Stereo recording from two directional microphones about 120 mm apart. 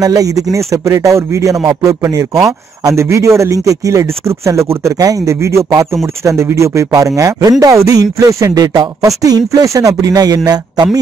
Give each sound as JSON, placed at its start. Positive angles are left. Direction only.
{"t": 0.0, "sound": "a man's voice", "side_deg": -30}